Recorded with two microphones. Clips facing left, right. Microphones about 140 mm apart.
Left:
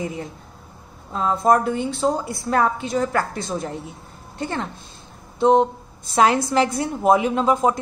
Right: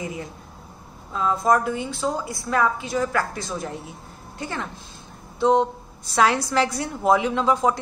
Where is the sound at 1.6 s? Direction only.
60° left (ahead or behind).